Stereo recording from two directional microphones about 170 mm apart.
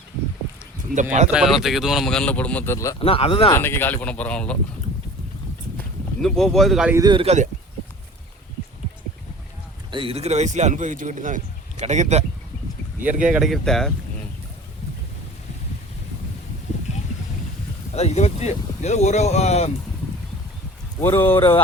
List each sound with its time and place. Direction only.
1.3 s speech: 5° right (ahead or behind); by 3.0 s 20° left (ahead or behind)
3.0 s speech: 35° left (ahead or behind)
3.5 s speech: 15° left (ahead or behind)
6.2 s speech: centre (ahead or behind)
6.9 s a man's voice: 25° right (ahead or behind)
9.9 s speech: 30° right (ahead or behind)
13.0 s speech: 10° right (ahead or behind)
17.9 s speech: 40° left (ahead or behind)
21.0 s speech: 15° left (ahead or behind)